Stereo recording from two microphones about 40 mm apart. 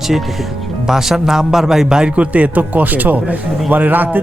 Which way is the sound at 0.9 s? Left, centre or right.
Centre.